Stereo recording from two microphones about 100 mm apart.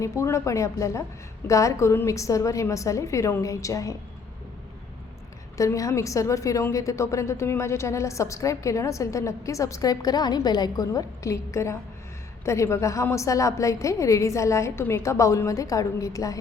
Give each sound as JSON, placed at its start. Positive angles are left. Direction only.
{"t": 0.0, "sound": "a woman's voice", "side_deg": 30}
{"t": 5.5, "sound": "a woman's voice", "side_deg": 35}